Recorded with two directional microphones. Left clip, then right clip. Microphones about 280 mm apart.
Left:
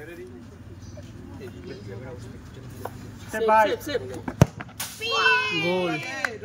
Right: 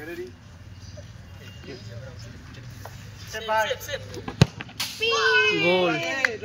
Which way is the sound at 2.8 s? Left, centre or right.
Left.